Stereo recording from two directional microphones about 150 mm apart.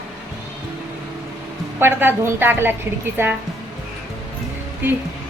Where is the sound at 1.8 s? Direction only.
15° right (ahead or behind).